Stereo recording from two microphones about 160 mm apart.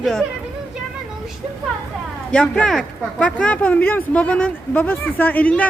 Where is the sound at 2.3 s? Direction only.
5° left (ahead or behind).